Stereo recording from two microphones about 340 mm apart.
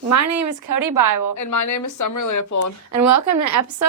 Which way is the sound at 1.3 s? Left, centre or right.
Left.